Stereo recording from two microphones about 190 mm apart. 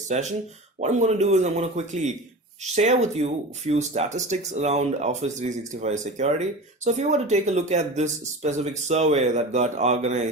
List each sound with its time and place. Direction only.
0.1 s speech: 35° right (ahead or behind)